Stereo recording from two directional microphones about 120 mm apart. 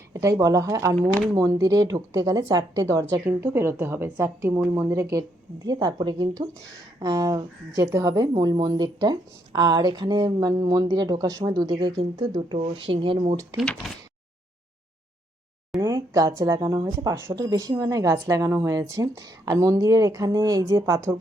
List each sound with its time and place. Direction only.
0.1 s a woman's voice: 25° right (ahead or behind)
12.5 s speech: 50° right (ahead or behind)
13.6 s speech: centre (ahead or behind)
15.8 s a woman's voice: 25° right (ahead or behind)